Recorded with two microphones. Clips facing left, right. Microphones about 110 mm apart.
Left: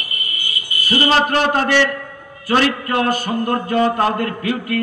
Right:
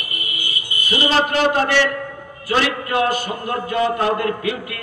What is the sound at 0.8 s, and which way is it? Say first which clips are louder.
A man's voice: left 2 dB; 45° left (ahead or behind).